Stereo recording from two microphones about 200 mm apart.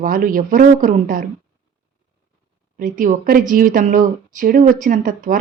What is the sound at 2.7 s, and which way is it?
A woman's voice, 40° right (ahead or behind).